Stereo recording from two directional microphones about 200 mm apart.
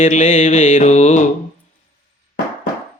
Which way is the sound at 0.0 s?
40° left (ahead or behind).